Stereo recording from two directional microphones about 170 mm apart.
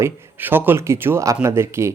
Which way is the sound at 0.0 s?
10° right (ahead or behind).